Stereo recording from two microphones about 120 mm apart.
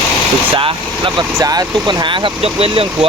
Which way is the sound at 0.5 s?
45° right (ahead or behind).